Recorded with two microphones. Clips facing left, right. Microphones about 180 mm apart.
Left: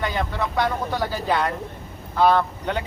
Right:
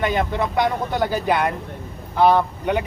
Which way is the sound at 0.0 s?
20° right (ahead or behind).